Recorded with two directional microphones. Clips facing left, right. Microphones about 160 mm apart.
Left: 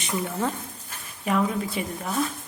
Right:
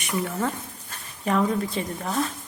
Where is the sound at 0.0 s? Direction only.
25° left (ahead or behind).